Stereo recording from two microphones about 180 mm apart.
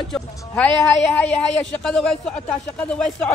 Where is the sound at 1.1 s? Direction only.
5° left (ahead or behind).